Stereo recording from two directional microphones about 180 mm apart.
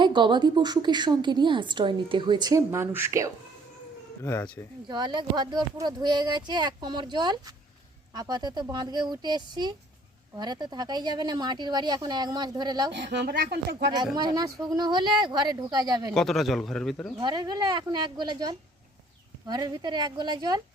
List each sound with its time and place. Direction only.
0.0 s a woman's voice: 25° right (ahead or behind)
4.2 s speech: 15° left (ahead or behind)
4.9 s a woman's voice: 25° right (ahead or behind)
12.9 s speech: 70° right (ahead or behind)
14.2 s a woman's voice: 20° right (ahead or behind)
16.1 s a man's voice: centre (ahead or behind)
17.2 s a woman's voice: 25° right (ahead or behind)